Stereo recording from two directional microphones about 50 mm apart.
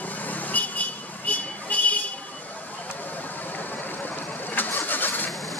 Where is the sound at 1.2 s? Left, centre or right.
Left.